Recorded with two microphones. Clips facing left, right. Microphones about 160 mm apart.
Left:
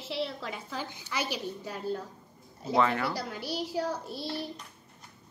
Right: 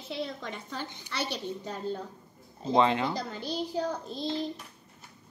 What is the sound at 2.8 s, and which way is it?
Speech, 20° right (ahead or behind).